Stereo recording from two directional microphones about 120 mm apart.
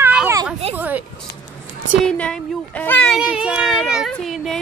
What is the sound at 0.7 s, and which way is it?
Speech, 15° right (ahead or behind).